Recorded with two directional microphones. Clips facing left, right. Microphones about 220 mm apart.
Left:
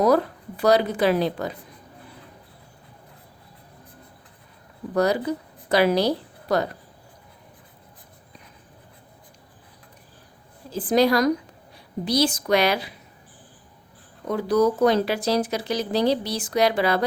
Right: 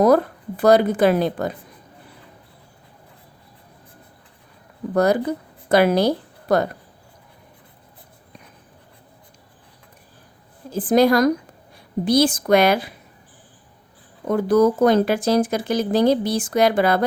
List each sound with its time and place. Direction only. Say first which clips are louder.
0.0 s speech: right 4 dB; 50° right (ahead or behind)
4.9 s a woman's voice: right 3 dB; 50° right (ahead or behind)
10.7 s speech: right 4 dB; 50° right (ahead or behind)
14.3 s speech: right 4 dB; 50° right (ahead or behind)